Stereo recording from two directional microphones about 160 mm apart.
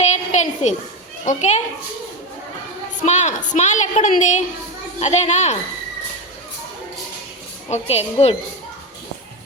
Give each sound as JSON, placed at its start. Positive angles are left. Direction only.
{"t": 0.0, "sound": "a sound", "side_deg": 45}
{"t": 1.2, "sound": "a woman's voice", "side_deg": 50}
{"t": 3.0, "sound": "a woman's voice", "side_deg": 45}
{"t": 7.7, "sound": "a woman's voice", "side_deg": 40}